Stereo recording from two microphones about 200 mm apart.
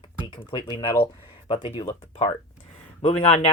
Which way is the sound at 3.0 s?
35° left (ahead or behind).